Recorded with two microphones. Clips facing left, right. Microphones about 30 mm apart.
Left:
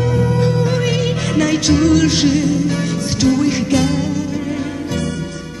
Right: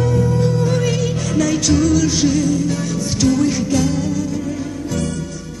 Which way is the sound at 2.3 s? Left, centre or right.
Left.